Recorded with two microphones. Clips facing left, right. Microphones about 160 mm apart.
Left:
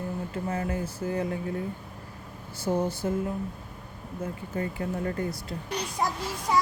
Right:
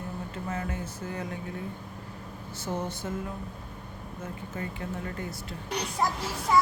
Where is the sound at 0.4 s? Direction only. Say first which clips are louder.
Left 4 dB; 30° left (ahead or behind).